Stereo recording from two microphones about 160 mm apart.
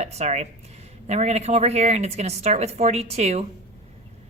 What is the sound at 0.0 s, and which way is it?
Speech, 45° right (ahead or behind).